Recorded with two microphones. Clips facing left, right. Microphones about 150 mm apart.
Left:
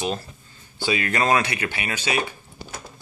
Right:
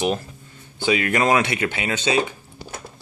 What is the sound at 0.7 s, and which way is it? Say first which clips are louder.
Speech: right 3 dB; 20° right (ahead or behind).